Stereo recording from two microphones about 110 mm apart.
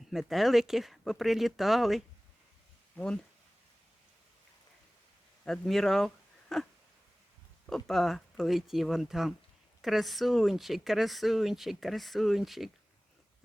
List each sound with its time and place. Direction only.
0.1 s speech: centre (ahead or behind)
5.5 s speech: centre (ahead or behind)
7.7 s speech: centre (ahead or behind)